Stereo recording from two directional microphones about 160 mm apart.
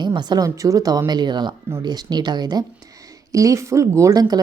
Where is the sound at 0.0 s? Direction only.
25° right (ahead or behind).